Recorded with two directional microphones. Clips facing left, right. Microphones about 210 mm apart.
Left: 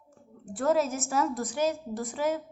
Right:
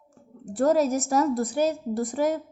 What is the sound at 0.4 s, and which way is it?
A woman's voice, 40° right (ahead or behind).